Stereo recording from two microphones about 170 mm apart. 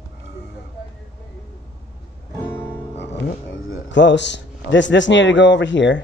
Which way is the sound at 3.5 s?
90° left.